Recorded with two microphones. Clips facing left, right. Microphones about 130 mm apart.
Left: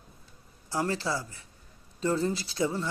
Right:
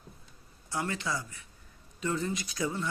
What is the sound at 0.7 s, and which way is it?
Speech, 35° left (ahead or behind).